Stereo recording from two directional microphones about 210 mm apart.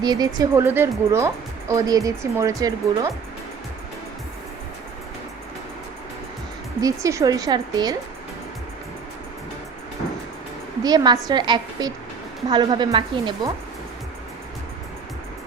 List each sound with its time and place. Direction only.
0.0 s a woman's voice: 20° right (ahead or behind)
6.8 s a woman's voice: 15° right (ahead or behind)
10.8 s a woman's voice: 20° right (ahead or behind)